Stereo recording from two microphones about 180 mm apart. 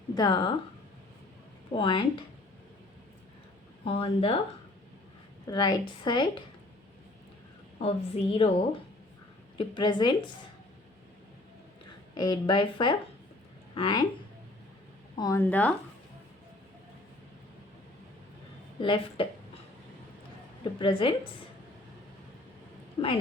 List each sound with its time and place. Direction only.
0.1 s a woman's voice: 25° left (ahead or behind)
1.7 s speech: 30° left (ahead or behind)
3.8 s a woman's voice: 30° left (ahead or behind)
5.5 s speech: 25° left (ahead or behind)
7.8 s a woman's voice: 35° left (ahead or behind)
12.1 s speech: 25° left (ahead or behind)
15.2 s speech: 15° left (ahead or behind)
18.8 s speech: 30° left (ahead or behind)
20.7 s speech: 30° left (ahead or behind)
23.0 s speech: 20° left (ahead or behind)